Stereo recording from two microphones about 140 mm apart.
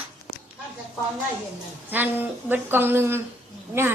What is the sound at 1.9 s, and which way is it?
A woman's voice, 15° right (ahead or behind).